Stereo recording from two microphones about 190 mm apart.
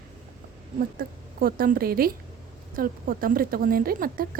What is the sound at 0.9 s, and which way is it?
A woman's voice, 50° right (ahead or behind).